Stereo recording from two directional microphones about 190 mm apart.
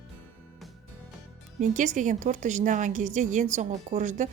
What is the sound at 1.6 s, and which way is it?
A woman's voice, 40° right (ahead or behind).